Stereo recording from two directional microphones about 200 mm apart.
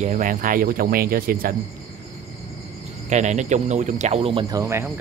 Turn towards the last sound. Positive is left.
turn(degrees=-15)  # may be behind; listen again after turning